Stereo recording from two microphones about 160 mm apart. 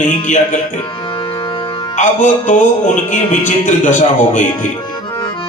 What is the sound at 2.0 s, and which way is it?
Speech, 50° left (ahead or behind).